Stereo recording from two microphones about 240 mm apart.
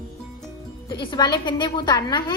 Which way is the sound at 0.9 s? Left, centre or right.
Centre.